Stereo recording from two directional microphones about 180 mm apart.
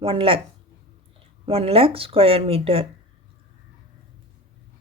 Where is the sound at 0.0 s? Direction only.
30° right (ahead or behind).